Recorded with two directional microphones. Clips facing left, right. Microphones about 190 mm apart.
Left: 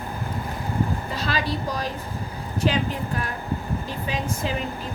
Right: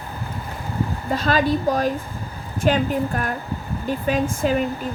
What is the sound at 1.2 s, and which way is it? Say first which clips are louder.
Speech: right 9 dB; 50° right (ahead or behind).